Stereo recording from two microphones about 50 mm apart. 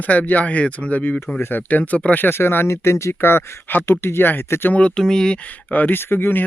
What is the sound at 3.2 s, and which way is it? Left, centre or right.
Speech, left.